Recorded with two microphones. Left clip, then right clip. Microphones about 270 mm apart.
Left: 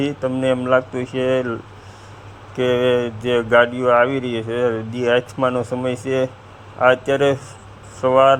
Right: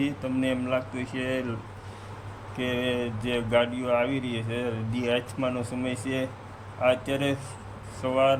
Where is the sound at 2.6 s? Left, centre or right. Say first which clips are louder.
Left 12 dB; left.